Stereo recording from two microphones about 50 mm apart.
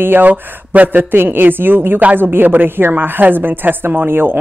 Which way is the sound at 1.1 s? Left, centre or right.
Right.